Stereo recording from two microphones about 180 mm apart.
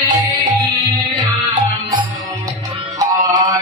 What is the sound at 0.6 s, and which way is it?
Music, 25° right (ahead or behind).